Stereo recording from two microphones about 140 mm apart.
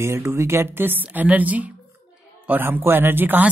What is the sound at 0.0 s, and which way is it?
A woman's voice, 20° right (ahead or behind).